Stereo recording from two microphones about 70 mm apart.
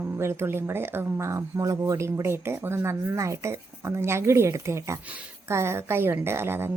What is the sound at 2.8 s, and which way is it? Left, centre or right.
Speech, right.